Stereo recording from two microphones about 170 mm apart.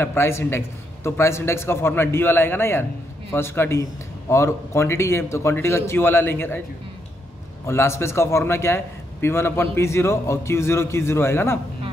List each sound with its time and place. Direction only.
0.0 s a man's voice: 15° left (ahead or behind)
7.6 s a man's voice: 15° left (ahead or behind)